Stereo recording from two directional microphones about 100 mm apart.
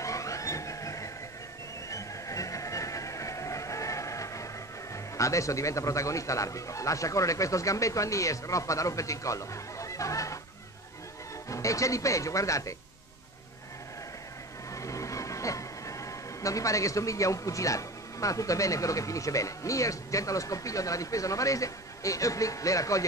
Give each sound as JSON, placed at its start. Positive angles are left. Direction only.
{"t": 0.0, "sound": "vehicle", "side_deg": 30}
{"t": 1.9, "sound": "a sound", "side_deg": 35}
{"t": 4.9, "sound": "a man's voice", "side_deg": 30}
{"t": 11.4, "sound": "a man's voice", "side_deg": 35}
{"t": 14.7, "sound": "speech", "side_deg": 30}